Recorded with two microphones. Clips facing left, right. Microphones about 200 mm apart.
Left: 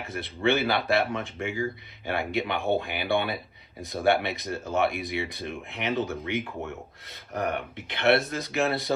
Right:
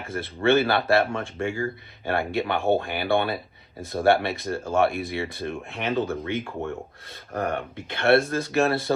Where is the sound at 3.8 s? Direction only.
15° left (ahead or behind).